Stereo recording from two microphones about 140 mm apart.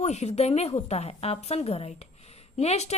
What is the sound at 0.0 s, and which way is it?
A woman's voice, 55° left (ahead or behind).